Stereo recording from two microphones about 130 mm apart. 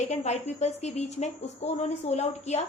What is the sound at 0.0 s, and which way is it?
Speech, 60° left (ahead or behind).